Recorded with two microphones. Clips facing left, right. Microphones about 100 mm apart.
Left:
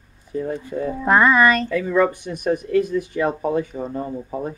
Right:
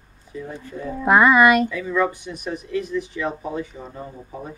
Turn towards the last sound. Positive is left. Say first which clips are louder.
# left 8 dB
turn(degrees=40)  # may be behind; listen again after turning